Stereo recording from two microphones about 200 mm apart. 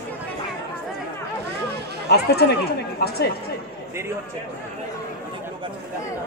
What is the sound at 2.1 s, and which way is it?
Speech, 55° left (ahead or behind).